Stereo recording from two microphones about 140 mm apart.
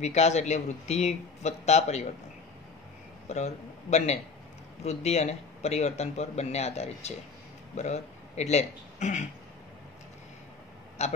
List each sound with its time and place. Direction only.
0.0 s speech: 55° left (ahead or behind)
3.3 s a man's voice: 55° left (ahead or behind)
11.0 s speech: 50° left (ahead or behind)